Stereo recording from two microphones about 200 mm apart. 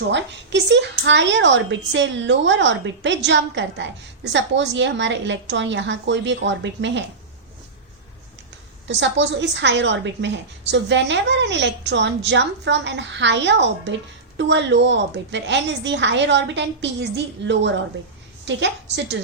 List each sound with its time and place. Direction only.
0.1 s a woman's voice: 60° right (ahead or behind)
8.9 s a woman's voice: 60° right (ahead or behind)